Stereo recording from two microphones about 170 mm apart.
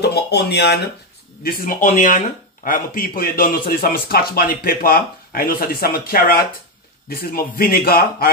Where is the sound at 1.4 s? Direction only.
55° left (ahead or behind).